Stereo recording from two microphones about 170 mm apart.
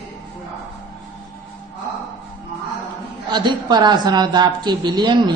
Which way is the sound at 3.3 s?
25° right (ahead or behind).